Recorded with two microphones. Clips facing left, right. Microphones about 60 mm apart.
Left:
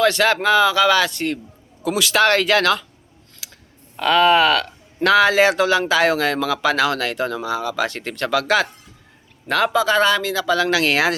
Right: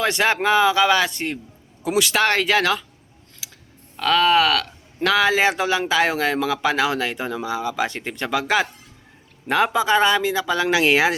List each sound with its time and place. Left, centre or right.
0.0 s speech: centre
3.9 s speech: centre